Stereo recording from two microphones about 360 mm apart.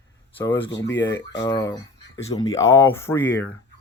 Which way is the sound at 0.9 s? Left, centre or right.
Left.